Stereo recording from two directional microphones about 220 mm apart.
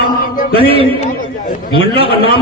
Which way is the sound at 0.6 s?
25° right (ahead or behind).